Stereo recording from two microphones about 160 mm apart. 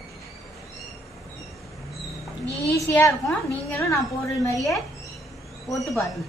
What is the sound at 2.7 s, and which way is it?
A woman's voice, 15° left (ahead or behind).